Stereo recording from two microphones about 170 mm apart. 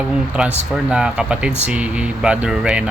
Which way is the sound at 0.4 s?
5° right (ahead or behind).